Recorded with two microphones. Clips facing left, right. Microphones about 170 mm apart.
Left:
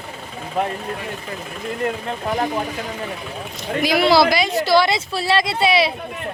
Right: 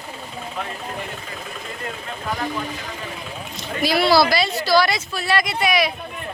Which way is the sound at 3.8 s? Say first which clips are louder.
Left 2 dB; 15° left (ahead or behind).